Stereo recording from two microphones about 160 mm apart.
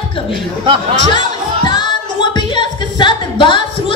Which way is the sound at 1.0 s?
30° left (ahead or behind).